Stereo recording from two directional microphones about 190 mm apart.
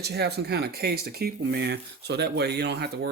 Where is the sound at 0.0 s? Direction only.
60° right (ahead or behind).